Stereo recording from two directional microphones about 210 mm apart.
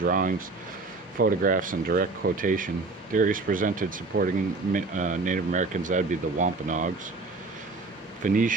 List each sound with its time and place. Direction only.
0.0 s speech: 40° right (ahead or behind)
8.2 s speech: 40° right (ahead or behind)